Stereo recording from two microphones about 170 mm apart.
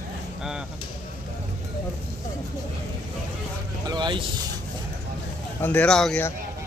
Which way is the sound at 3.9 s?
25° right (ahead or behind).